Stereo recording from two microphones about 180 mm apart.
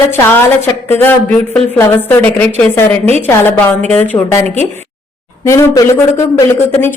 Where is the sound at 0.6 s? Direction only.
10° left (ahead or behind).